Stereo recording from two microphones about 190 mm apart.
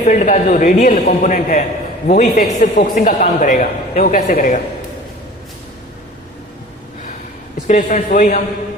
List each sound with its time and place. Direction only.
0.0 s a man's voice: 40° left (ahead or behind)
7.7 s a man's voice: 40° left (ahead or behind)